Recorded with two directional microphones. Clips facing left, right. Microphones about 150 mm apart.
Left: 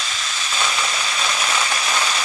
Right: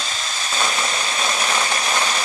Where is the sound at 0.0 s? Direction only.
40° right (ahead or behind).